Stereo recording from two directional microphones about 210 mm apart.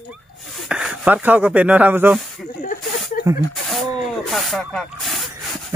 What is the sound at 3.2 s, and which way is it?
Snake, 45° left (ahead or behind).